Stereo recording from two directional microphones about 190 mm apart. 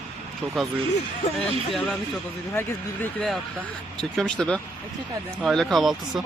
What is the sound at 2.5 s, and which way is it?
Speech, 5° left (ahead or behind).